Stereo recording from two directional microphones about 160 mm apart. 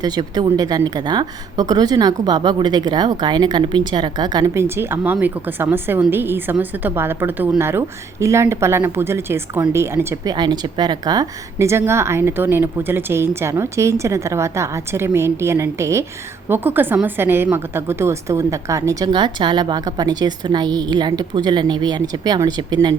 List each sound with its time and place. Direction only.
0.0 s a woman's voice: 25° right (ahead or behind)
10.3 s a woman's voice: 25° right (ahead or behind)